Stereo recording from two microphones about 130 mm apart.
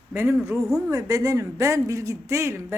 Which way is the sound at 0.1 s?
20° right (ahead or behind).